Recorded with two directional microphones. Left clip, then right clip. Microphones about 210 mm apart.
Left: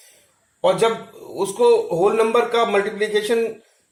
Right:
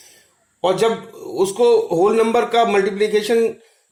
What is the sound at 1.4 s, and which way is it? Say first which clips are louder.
Speech: right 2 dB; 50° right (ahead or behind).